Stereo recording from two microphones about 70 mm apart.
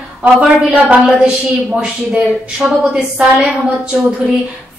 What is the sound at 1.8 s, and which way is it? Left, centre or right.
A woman's voice, centre.